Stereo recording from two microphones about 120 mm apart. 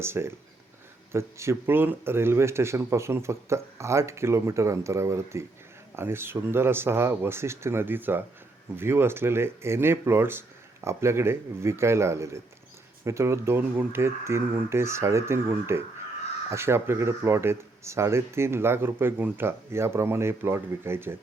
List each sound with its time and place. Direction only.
0.0 s speech: 20° right (ahead or behind)